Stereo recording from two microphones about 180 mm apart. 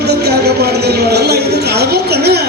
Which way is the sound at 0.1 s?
65° right (ahead or behind).